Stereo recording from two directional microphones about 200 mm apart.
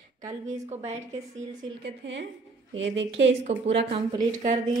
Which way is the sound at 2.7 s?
65° right (ahead or behind).